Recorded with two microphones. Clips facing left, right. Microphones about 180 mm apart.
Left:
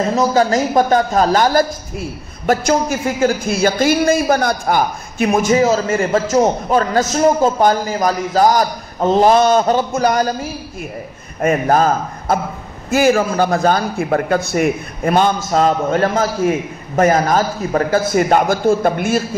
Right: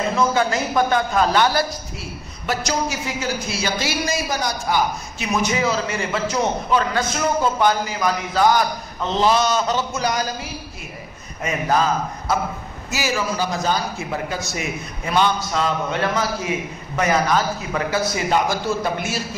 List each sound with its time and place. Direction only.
0.1 s a man's voice: 40° left (ahead or behind)